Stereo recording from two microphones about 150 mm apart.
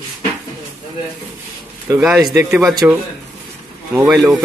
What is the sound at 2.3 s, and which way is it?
Speech, 15° right (ahead or behind).